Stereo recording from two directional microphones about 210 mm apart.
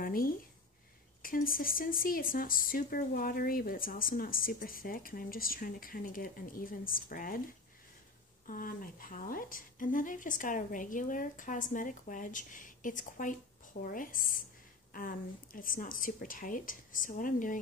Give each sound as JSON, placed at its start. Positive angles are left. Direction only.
{"t": 0.0, "sound": "a sound", "side_deg": 45}
{"t": 1.2, "sound": "speech", "side_deg": 45}
{"t": 8.5, "sound": "a woman's voice", "side_deg": 40}